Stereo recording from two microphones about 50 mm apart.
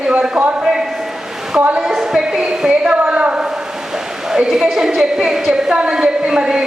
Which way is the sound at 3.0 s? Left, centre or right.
Right.